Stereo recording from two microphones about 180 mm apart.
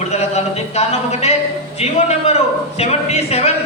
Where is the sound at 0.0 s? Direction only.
35° left (ahead or behind).